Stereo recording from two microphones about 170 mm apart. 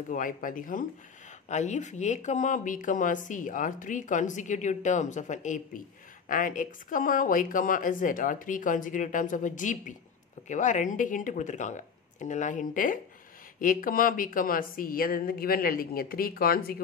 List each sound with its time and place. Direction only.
0.1 s a woman's voice: 50° left (ahead or behind)